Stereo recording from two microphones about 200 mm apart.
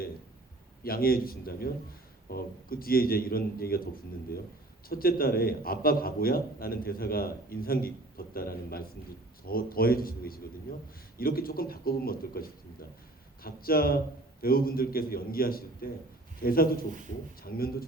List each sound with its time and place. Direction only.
0.9 s a man's voice: 45° left (ahead or behind)